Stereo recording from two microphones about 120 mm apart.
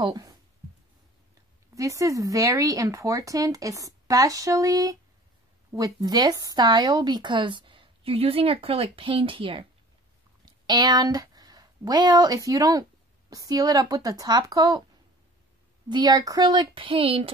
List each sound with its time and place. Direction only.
0.0 s speech: 30° right (ahead or behind)
1.8 s a woman's voice: 30° right (ahead or behind); by 9.7 s 45° right (ahead or behind)
10.4 s speech: 35° right (ahead or behind)
15.9 s speech: 35° right (ahead or behind); by 17.3 s 50° right (ahead or behind)